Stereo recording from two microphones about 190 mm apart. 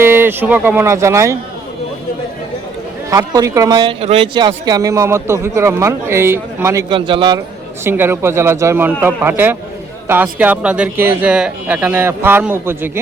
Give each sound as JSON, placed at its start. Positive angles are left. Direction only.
{"t": 0.0, "sound": "speech", "side_deg": -10}
{"t": 3.1, "sound": "speech", "side_deg": -15}
{"t": 6.9, "sound": "a man's voice", "side_deg": -25}
{"t": 7.9, "sound": "speech", "side_deg": -10}